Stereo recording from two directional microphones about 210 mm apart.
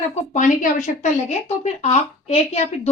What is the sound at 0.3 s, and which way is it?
Speech, 35° left (ahead or behind).